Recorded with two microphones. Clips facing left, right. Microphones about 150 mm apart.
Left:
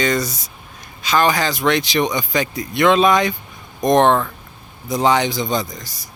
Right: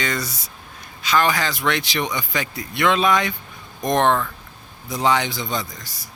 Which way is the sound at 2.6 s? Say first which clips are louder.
Left 5 dB; 25° left (ahead or behind).